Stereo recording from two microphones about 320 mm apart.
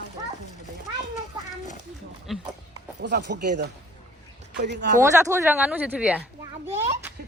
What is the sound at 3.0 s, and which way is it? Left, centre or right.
Speech, right.